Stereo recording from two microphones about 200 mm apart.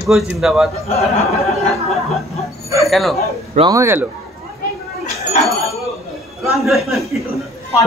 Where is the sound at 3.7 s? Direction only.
10° right (ahead or behind).